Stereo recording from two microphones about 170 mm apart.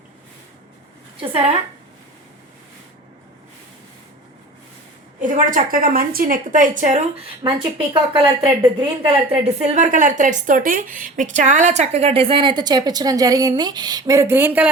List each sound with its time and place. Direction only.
1.2 s speech: 30° right (ahead or behind)
5.2 s speech: 50° right (ahead or behind)
7.4 s speech: 30° right (ahead or behind); by 14.7 s 10° right (ahead or behind)